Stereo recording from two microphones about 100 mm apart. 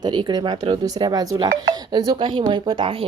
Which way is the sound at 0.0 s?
45° right (ahead or behind).